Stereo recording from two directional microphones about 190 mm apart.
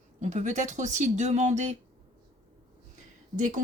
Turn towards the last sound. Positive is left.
turn(degrees=-40)  # may be behind; listen again after turning